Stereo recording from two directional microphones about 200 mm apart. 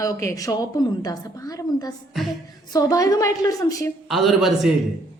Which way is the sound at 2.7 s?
15° left (ahead or behind).